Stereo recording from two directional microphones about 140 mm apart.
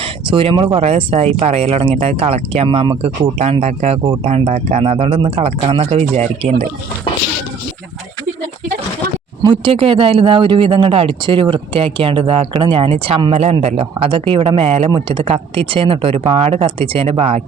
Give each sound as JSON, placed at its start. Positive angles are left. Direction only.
{"t": 0.0, "sound": "a sound", "side_deg": -40}
{"t": 0.8, "sound": "speech", "side_deg": -50}
{"t": 2.6, "sound": "a man's voice", "side_deg": -35}
{"t": 3.3, "sound": "speech", "side_deg": -50}
{"t": 9.4, "sound": "a man's voice", "side_deg": -35}
{"t": 14.8, "sound": "a man's voice", "side_deg": -35}